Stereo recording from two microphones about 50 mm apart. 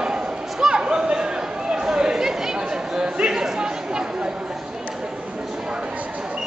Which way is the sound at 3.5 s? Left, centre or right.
Centre.